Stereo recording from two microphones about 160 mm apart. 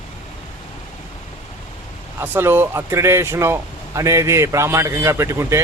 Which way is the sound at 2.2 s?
15° right (ahead or behind).